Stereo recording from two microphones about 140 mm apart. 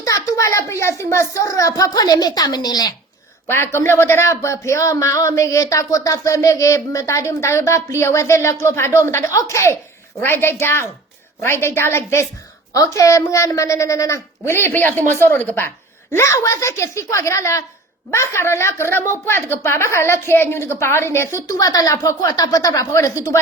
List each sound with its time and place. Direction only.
0.0 s speech: 25° left (ahead or behind)
3.5 s a woman's voice: 15° left (ahead or behind)